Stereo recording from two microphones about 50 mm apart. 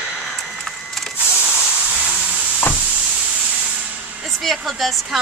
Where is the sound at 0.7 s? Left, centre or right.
Centre.